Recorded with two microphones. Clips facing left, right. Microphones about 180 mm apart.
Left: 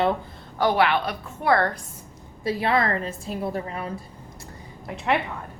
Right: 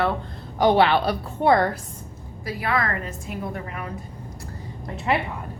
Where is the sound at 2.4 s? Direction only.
25° left (ahead or behind).